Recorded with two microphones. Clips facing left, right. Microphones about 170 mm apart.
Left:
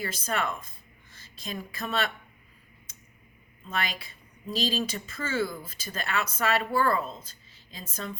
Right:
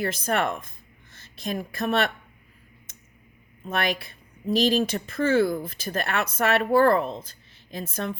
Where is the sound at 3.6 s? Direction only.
65° right (ahead or behind).